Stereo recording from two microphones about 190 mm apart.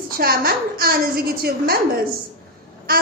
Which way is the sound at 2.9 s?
50° right (ahead or behind).